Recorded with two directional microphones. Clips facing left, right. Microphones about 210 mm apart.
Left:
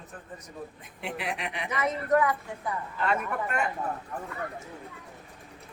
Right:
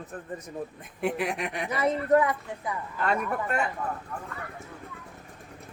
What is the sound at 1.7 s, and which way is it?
Speech, 30° right (ahead or behind).